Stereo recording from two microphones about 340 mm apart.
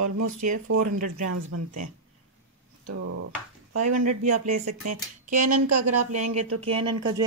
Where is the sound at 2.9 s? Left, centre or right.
Right.